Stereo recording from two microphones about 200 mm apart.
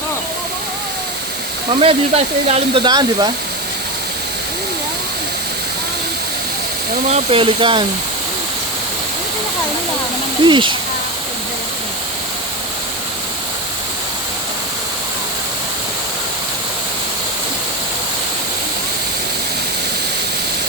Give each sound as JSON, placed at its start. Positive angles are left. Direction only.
{"t": 1.7, "sound": "speech", "side_deg": -30}
{"t": 7.1, "sound": "speech", "side_deg": -25}
{"t": 10.4, "sound": "speech", "side_deg": -25}